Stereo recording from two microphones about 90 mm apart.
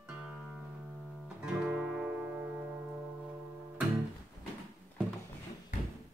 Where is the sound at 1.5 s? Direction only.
10° right (ahead or behind).